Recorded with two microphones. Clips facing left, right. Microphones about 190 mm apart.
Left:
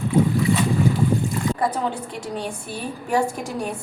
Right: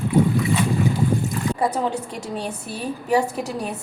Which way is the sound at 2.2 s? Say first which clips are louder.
Even; 5° right (ahead or behind).